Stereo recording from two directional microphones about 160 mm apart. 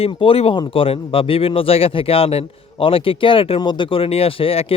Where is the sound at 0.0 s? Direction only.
35° left (ahead or behind).